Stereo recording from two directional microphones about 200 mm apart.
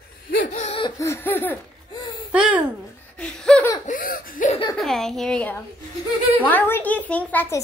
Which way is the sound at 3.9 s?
45° left (ahead or behind).